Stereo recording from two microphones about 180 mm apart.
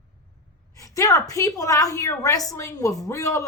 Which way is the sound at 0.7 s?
20° left (ahead or behind).